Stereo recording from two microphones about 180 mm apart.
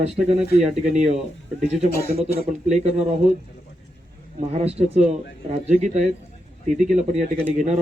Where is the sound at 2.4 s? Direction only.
35° right (ahead or behind).